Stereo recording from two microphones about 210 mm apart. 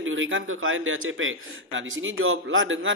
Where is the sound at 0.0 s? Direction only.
65° right (ahead or behind).